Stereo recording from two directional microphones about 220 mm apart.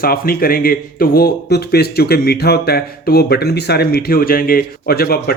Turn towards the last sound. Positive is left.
turn(degrees=45)  # may be behind; listen again after turning